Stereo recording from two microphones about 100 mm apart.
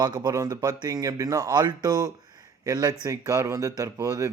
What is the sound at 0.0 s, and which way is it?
Speech, 45° right (ahead or behind).